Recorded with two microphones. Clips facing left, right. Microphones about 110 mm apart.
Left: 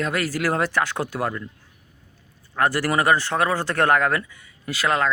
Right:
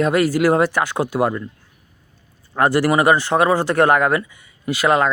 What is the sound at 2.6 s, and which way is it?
Speech, 20° right (ahead or behind).